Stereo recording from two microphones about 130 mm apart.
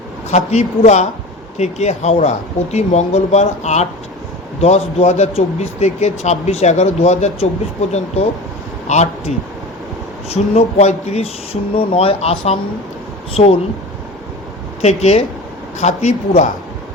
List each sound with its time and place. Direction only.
0.3 s speech: 60° left (ahead or behind)
11.8 s speech: 45° left (ahead or behind)
14.8 s speech: 55° left (ahead or behind)